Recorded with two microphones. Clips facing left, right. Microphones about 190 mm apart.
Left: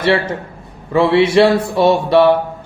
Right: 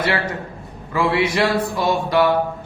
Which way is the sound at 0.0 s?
25° left (ahead or behind).